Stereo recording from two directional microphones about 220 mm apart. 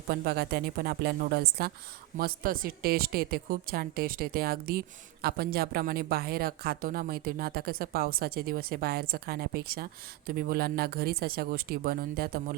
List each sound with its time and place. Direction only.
0.1 s a woman's voice: 45° right (ahead or behind)